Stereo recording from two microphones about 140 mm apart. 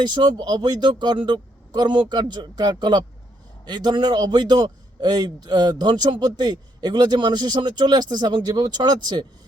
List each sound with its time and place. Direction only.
0.0 s a man's voice: 30° right (ahead or behind)